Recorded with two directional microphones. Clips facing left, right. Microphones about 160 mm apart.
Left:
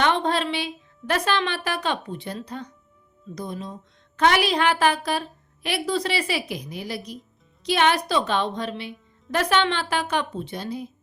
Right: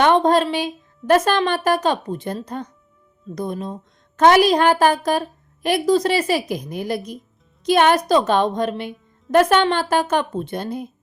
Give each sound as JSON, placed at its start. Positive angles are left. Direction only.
{"t": 0.0, "sound": "a woman's voice", "side_deg": -45}